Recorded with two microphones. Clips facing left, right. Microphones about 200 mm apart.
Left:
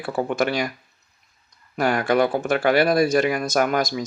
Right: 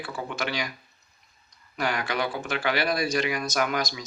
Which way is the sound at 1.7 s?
50° left (ahead or behind).